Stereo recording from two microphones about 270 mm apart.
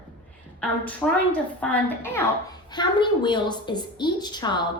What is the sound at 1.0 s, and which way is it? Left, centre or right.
A woman's voice, centre.